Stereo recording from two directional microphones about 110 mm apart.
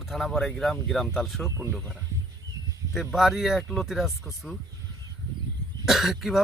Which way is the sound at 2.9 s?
Centre (ahead or behind).